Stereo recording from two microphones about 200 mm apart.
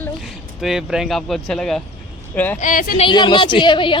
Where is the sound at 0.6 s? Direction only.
Centre (ahead or behind).